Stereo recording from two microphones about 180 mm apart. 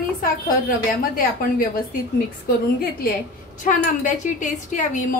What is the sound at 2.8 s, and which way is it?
Speech, 55° left (ahead or behind).